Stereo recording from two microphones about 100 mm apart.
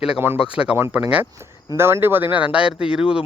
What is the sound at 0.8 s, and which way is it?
Speech, 20° right (ahead or behind).